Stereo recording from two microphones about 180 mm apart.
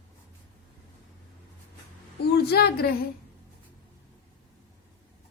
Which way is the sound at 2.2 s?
60° left (ahead or behind).